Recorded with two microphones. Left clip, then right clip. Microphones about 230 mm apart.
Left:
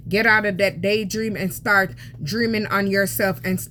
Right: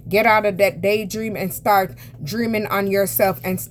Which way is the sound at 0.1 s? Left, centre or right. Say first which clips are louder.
Right 2 dB; right.